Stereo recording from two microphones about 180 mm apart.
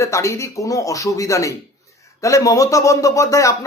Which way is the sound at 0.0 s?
15° left (ahead or behind).